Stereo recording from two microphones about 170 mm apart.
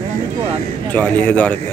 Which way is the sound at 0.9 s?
10° left (ahead or behind).